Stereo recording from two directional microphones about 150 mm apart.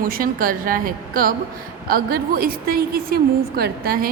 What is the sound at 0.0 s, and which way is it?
A woman's voice, 70° right (ahead or behind).